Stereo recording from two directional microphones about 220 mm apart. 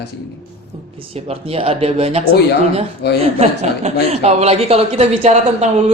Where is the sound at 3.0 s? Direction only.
50° left (ahead or behind).